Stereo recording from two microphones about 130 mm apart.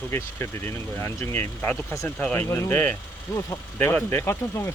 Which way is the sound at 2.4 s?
20° left (ahead or behind).